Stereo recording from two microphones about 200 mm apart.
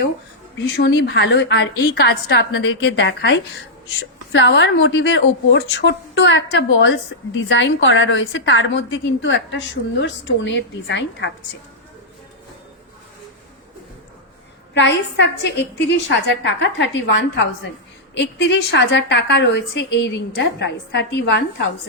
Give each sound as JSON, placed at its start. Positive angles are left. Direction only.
{"t": 0.6, "sound": "a woman's voice", "side_deg": 65}
{"t": 2.5, "sound": "a woman's voice", "side_deg": 70}
{"t": 14.7, "sound": "a woman's voice", "side_deg": 60}